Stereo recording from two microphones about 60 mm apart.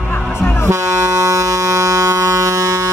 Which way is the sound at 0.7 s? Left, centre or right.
Right.